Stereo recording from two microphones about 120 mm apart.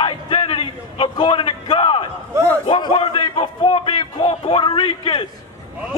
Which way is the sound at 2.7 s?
40° left (ahead or behind).